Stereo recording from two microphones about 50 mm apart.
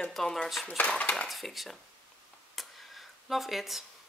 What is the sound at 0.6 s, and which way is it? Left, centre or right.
Dishes, left.